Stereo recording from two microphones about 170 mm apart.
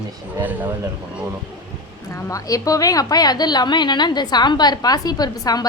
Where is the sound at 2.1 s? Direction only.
15° left (ahead or behind).